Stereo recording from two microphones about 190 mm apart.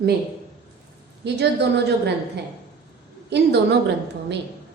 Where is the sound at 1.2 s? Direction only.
60° right (ahead or behind).